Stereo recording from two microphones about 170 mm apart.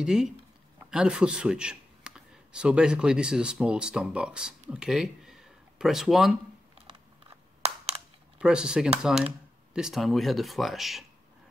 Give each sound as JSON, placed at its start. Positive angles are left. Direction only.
{"t": 0.0, "sound": "speech", "side_deg": -5}
{"t": 8.4, "sound": "speech", "side_deg": -5}